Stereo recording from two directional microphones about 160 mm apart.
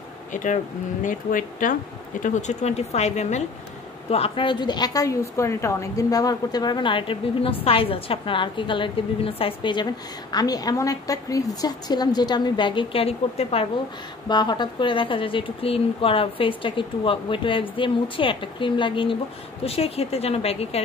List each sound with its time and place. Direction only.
0.3 s a woman's voice: 50° left (ahead or behind)
14.3 s a woman's voice: 25° left (ahead or behind)